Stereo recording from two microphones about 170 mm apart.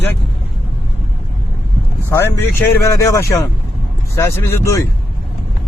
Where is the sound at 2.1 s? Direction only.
15° left (ahead or behind).